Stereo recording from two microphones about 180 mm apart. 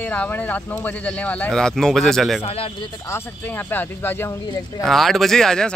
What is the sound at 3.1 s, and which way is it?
Speech, 10° left (ahead or behind).